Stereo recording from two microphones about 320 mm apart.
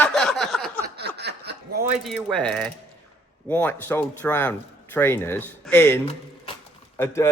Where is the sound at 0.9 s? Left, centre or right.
Right.